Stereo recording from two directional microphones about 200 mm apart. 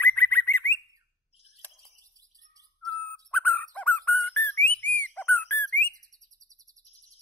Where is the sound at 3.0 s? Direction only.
10° left (ahead or behind).